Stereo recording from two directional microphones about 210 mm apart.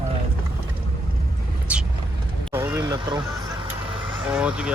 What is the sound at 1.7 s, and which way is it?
Vehicle, 5° right (ahead or behind).